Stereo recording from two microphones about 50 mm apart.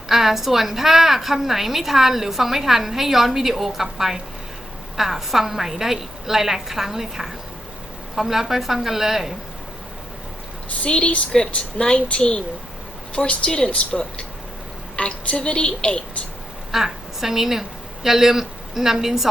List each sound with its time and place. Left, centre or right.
0.1 s a woman's voice: centre
10.8 s a woman's voice: left
16.7 s a woman's voice: centre